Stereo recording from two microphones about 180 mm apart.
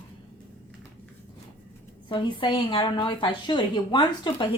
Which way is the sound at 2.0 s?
25° left (ahead or behind).